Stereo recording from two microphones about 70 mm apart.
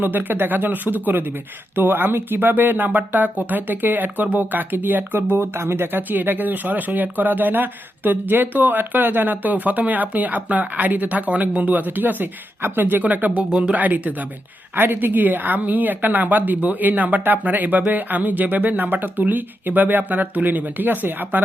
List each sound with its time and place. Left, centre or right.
0.0 s speech: right